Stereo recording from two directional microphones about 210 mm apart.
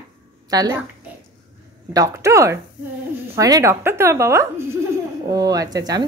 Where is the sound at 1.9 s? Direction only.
15° right (ahead or behind).